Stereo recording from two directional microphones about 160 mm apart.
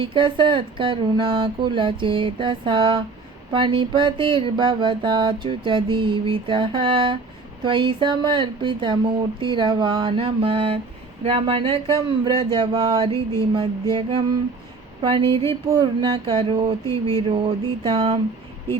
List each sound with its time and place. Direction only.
0.0 s mantra: 30° right (ahead or behind)